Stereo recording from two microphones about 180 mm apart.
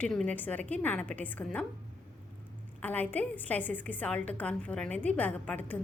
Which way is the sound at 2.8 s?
10° left (ahead or behind).